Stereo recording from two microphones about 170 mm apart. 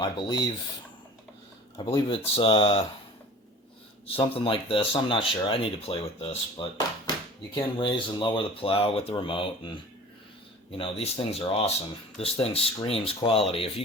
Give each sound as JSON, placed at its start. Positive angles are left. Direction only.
{"t": 0.0, "sound": "speech", "side_deg": 25}
{"t": 1.8, "sound": "speech", "side_deg": 30}
{"t": 4.0, "sound": "speech", "side_deg": 35}